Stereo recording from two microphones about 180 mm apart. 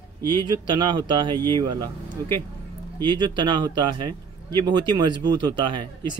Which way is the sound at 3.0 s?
25° right (ahead or behind).